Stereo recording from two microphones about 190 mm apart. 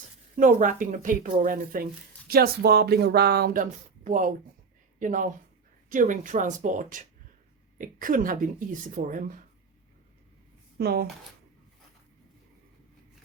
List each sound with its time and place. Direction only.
0.3 s speech: 45° right (ahead or behind)
10.8 s speech: 55° right (ahead or behind)